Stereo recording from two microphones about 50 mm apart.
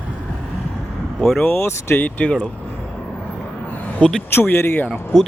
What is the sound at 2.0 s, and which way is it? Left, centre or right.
Speech, left.